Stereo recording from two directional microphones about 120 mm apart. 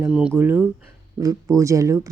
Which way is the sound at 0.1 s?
10° right (ahead or behind).